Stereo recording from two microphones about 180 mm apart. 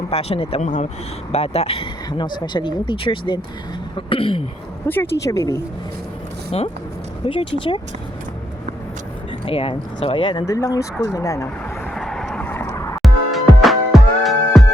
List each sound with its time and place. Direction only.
0.1 s speech: 35° left (ahead or behind)
4.9 s speech: 15° left (ahead or behind)
6.5 s speech: 35° left (ahead or behind)
9.5 s speech: 30° left (ahead or behind)
10.4 s speech: 15° left (ahead or behind)
11.9 s vehicle: centre (ahead or behind)
13.0 s music: centre (ahead or behind)